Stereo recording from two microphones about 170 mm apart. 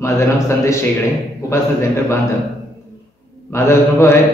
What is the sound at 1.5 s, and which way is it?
Mantra, 15° left (ahead or behind).